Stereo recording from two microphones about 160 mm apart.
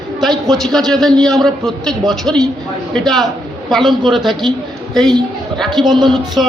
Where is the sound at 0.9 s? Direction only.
Centre (ahead or behind).